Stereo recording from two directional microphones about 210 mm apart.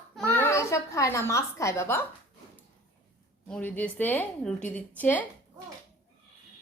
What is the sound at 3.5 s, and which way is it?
A woman's voice, 10° left (ahead or behind).